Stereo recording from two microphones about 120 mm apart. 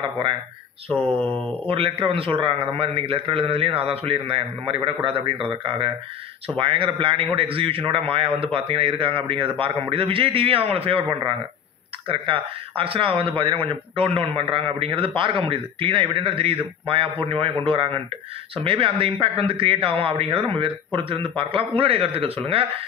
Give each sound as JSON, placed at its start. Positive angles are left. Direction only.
{"t": 0.8, "sound": "speech", "side_deg": -55}
{"t": 1.1, "sound": "speech", "side_deg": 10}
{"t": 1.7, "sound": "a man's voice", "side_deg": -50}